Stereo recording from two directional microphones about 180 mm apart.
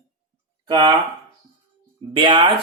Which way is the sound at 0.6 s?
25° right (ahead or behind).